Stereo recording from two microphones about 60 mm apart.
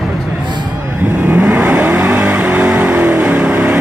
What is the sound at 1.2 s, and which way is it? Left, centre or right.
Vehicle, right.